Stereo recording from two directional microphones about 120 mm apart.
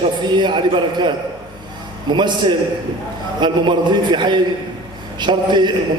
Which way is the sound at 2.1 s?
40° right (ahead or behind).